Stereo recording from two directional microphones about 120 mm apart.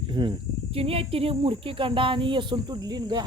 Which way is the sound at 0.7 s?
50° right (ahead or behind).